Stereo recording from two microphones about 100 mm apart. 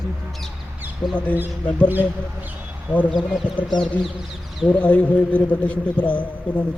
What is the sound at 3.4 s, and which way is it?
Speech, 15° right (ahead or behind).